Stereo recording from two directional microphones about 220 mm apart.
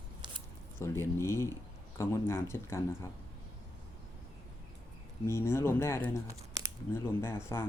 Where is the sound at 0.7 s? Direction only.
10° left (ahead or behind).